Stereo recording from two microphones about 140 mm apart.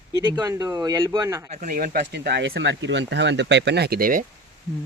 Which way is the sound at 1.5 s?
75° right (ahead or behind).